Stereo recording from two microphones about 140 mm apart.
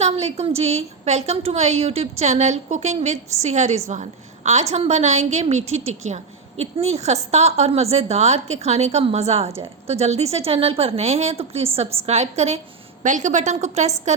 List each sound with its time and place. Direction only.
0.0 s a woman's voice: 50° right (ahead or behind)
13.0 s a woman's voice: 60° right (ahead or behind)